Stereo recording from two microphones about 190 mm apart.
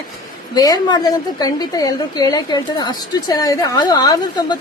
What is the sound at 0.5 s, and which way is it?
A woman's voice, 20° left (ahead or behind).